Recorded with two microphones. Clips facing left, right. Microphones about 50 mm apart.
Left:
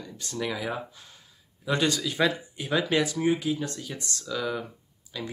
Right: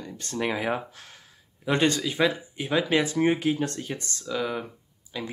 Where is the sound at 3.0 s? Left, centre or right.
Right.